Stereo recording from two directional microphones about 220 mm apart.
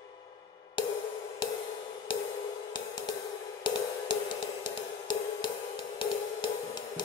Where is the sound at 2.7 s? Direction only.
20° left (ahead or behind).